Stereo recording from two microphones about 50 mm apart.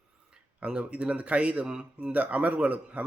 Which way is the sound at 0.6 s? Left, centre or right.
Right.